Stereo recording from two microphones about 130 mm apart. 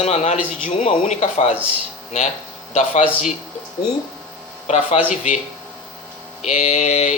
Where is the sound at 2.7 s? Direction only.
55° left (ahead or behind).